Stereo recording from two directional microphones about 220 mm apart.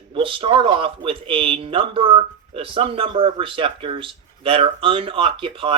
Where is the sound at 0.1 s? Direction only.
25° right (ahead or behind).